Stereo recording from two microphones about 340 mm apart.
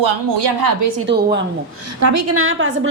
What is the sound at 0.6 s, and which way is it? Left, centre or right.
Speech, right.